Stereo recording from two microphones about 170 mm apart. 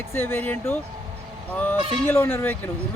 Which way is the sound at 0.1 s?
15° left (ahead or behind).